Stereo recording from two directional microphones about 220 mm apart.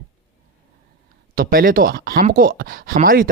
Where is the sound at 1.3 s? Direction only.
40° right (ahead or behind).